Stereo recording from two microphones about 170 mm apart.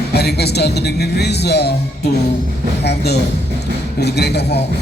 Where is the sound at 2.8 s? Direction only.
80° left.